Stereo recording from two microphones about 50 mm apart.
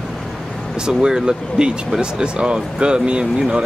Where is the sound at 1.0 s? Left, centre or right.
Centre.